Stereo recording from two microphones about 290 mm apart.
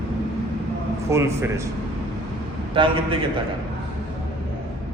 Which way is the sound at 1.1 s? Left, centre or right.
Centre.